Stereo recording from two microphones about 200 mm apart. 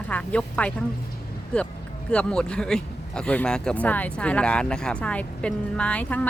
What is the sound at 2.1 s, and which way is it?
Speech, 5° left (ahead or behind).